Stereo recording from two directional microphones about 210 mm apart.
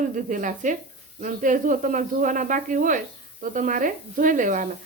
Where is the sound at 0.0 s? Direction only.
40° right (ahead or behind).